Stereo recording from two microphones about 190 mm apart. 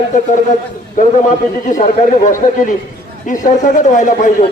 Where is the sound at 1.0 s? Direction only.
40° left (ahead or behind).